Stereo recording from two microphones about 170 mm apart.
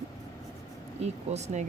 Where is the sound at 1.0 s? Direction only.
40° right (ahead or behind).